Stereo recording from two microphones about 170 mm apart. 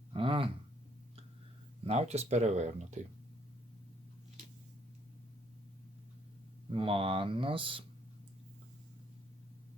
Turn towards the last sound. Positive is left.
turn(degrees=-30)  # may be behind; listen again after turning